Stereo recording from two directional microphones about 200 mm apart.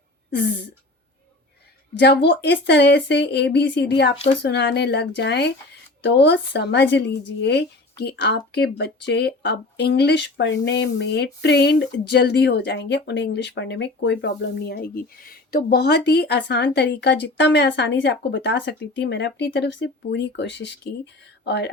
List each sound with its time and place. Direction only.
2.0 s a woman's voice: 60° left (ahead or behind)